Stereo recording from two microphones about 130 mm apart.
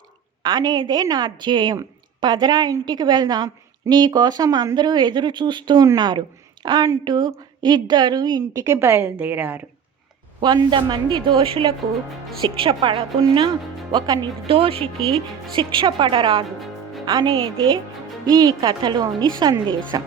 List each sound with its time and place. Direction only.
0.4 s a woman's voice: 30° right (ahead or behind); by 9.6 s 15° right (ahead or behind)
10.4 s a woman's voice: 35° right (ahead or behind)
14.4 s a woman's voice: 45° right (ahead or behind)